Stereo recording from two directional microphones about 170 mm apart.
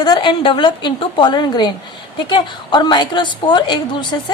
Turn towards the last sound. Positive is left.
turn(degrees=25)  # may be behind; listen again after turning